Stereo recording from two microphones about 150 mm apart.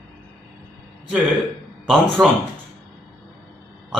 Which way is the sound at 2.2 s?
25° right (ahead or behind).